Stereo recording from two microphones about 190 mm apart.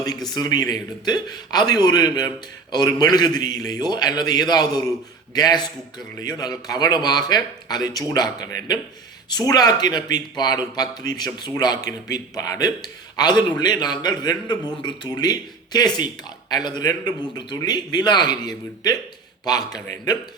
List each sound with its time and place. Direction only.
0.3 s a man's voice: 20° left (ahead or behind)